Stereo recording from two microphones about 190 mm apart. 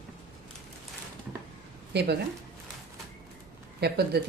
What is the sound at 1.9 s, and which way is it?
Speech, 60° right (ahead or behind).